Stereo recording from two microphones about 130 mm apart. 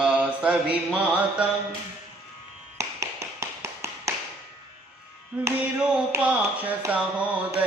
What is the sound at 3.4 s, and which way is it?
Tap, 20° right (ahead or behind).